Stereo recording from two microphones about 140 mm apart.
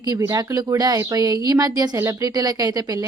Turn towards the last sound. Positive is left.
turn(degrees=-25)  # may be behind; listen again after turning